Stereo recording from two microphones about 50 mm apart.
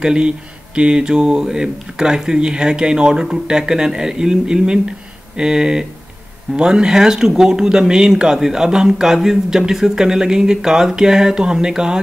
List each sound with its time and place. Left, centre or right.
0.0 s speech: centre